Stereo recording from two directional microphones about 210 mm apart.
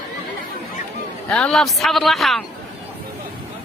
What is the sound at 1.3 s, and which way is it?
A man's voice, 5° left (ahead or behind).